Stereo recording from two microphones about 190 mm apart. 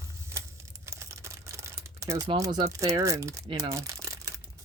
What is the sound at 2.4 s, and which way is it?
Speech, 15° right (ahead or behind).